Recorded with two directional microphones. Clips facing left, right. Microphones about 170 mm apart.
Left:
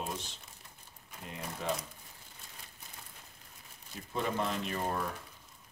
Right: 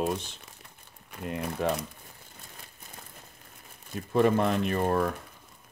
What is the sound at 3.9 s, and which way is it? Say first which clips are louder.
Speech: right 12 dB; 60° right (ahead or behind).